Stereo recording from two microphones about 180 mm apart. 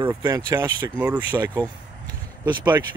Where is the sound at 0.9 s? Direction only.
5° right (ahead or behind).